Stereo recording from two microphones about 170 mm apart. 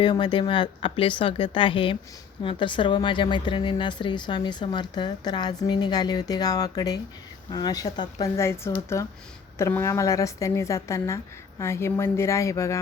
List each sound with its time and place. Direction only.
0.0 s speech: 25° left (ahead or behind)